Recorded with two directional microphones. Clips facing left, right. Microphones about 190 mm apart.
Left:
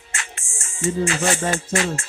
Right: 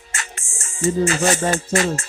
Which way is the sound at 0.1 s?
40° right (ahead or behind).